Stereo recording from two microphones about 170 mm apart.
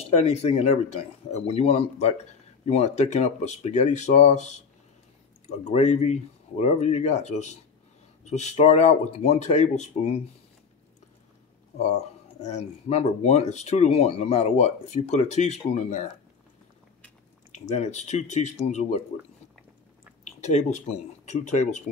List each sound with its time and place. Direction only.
0.0 s speech: 40° left (ahead or behind)
11.9 s speech: 40° left (ahead or behind)
17.5 s speech: 40° left (ahead or behind)
20.2 s speech: 40° left (ahead or behind)